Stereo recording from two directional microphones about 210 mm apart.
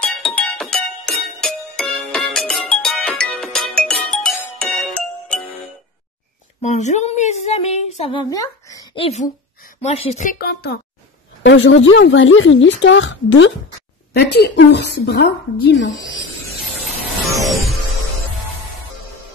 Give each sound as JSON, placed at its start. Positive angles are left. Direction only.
{"t": 0.0, "sound": "music", "side_deg": 5}
{"t": 6.6, "sound": "a woman's voice", "side_deg": 35}
{"t": 9.0, "sound": "speech", "side_deg": 35}
{"t": 10.4, "sound": "a child's voice", "side_deg": 50}
{"t": 11.4, "sound": "speech", "side_deg": 60}
{"t": 14.1, "sound": "speech", "side_deg": 50}
{"t": 17.4, "sound": "music", "side_deg": 0}